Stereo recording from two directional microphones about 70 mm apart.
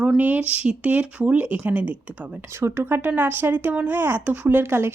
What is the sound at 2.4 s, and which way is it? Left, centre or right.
Speech, right.